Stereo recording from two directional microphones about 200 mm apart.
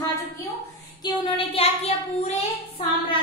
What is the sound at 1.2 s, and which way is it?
Speech, 25° left (ahead or behind).